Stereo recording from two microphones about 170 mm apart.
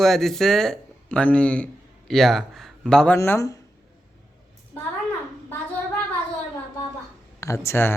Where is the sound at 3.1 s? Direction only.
15° left (ahead or behind).